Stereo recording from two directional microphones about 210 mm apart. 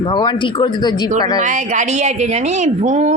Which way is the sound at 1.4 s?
35° right (ahead or behind).